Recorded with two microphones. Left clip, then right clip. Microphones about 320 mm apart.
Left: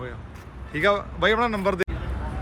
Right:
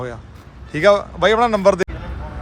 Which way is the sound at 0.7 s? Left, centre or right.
Centre.